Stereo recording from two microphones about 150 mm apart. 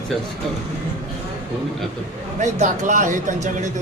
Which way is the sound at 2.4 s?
50° right (ahead or behind).